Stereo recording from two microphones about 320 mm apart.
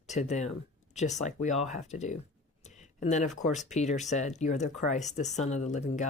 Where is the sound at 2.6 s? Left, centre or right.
Left.